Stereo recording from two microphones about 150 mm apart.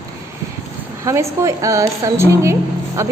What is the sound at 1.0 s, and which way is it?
A woman's voice, 20° right (ahead or behind).